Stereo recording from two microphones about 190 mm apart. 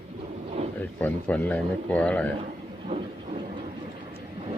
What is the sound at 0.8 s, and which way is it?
Speech, 10° left (ahead or behind).